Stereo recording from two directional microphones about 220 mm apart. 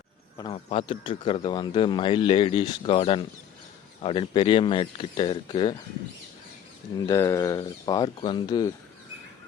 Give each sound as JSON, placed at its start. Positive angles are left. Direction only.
{"t": 0.3, "sound": "a man's voice", "side_deg": 25}
{"t": 6.9, "sound": "speech", "side_deg": 15}